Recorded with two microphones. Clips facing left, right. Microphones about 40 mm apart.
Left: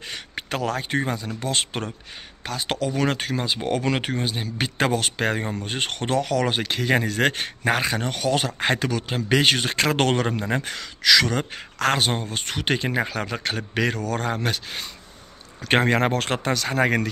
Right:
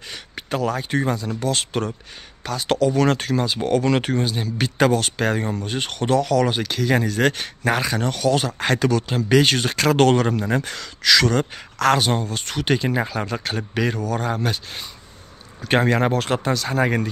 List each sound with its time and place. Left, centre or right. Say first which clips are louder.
0.1 s a sound: right 3 dB; left
1.0 s speech: right 4 dB; left
5.7 s speech: right 4 dB; left
8.8 s speech: right 5 dB; centre
9.3 s speech: right 2 dB; left
11.0 s speech: right 2 dB; centre
11.5 s speech: right 4 dB; left
13.7 s speech: right 2 dB; left
15.6 s speech: right 1 dB; left